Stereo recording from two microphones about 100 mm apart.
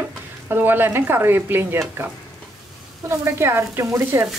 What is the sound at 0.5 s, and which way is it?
Speech, 20° right (ahead or behind).